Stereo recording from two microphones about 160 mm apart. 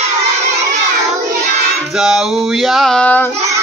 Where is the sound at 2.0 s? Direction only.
Centre (ahead or behind).